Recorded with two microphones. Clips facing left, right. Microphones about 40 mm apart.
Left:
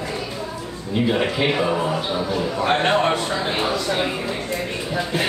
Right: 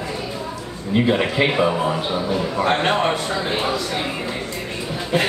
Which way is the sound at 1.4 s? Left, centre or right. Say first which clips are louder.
Right 3 dB; centre.